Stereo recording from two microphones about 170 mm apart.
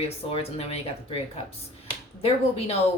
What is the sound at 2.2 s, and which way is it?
Speech, 35° left (ahead or behind).